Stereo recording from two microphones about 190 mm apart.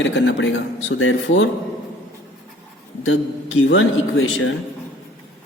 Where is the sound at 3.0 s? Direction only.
90° left.